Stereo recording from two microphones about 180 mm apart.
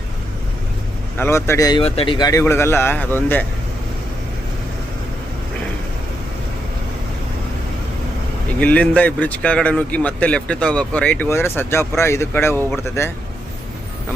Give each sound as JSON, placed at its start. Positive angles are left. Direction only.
{"t": 1.2, "sound": "speech", "side_deg": 15}
{"t": 1.8, "sound": "speech", "side_deg": 30}
{"t": 8.5, "sound": "speech", "side_deg": 5}